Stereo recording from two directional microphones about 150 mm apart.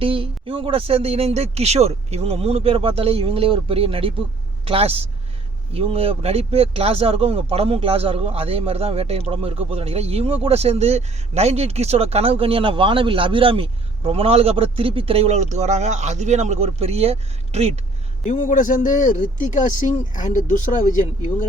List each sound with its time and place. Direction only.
0.0 s speech: 35° right (ahead or behind)
18.3 s speech: 60° left (ahead or behind)